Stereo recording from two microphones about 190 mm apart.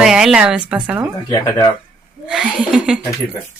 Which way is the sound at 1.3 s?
20° left (ahead or behind).